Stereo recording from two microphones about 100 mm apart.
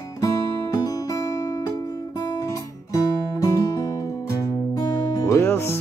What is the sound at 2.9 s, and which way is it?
Music, 35° left (ahead or behind).